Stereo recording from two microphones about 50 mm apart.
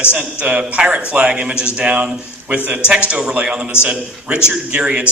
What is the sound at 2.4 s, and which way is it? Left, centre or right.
Speech, right.